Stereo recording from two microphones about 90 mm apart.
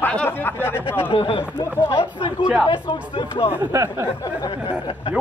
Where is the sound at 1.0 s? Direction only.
80° left.